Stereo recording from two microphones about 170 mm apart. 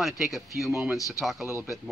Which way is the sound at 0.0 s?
Centre (ahead or behind).